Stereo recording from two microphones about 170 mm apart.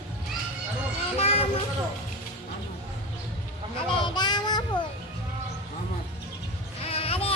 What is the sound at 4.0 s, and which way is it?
Child singing, 25° left (ahead or behind).